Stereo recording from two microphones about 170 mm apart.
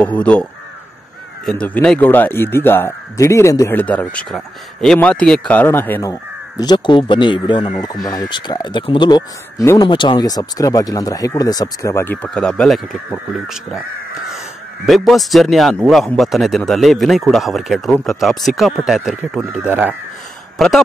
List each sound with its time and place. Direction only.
0.0 s speech: 10° left (ahead or behind)
14.9 s speech: centre (ahead or behind)
20.5 s speech: centre (ahead or behind)